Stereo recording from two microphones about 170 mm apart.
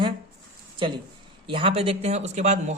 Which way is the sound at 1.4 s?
30° right (ahead or behind).